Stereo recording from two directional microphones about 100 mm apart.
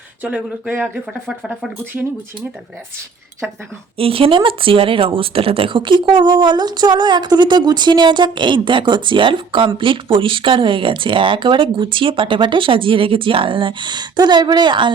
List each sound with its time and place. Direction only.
0.2 s speech: 10° right (ahead or behind)
3.9 s a woman's voice: 70° right (ahead or behind); by 14.8 s 50° right (ahead or behind)